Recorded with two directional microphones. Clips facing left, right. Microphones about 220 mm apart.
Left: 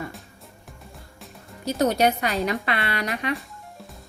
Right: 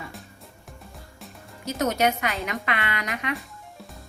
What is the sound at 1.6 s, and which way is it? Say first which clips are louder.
Speech: left 3 dB; 35° left (ahead or behind).